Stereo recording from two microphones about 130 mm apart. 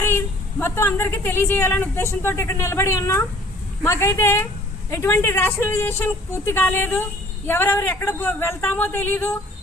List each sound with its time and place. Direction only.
0.6 s a woman's voice: 20° left (ahead or behind)